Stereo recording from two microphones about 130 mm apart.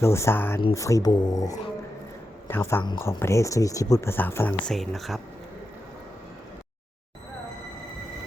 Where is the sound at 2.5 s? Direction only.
20° left (ahead or behind).